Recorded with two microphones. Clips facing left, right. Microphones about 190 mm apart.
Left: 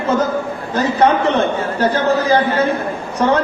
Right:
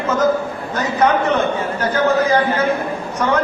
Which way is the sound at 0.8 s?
30° left (ahead or behind).